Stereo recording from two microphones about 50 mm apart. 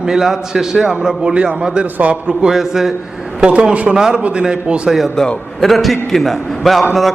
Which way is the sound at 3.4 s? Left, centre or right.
Centre.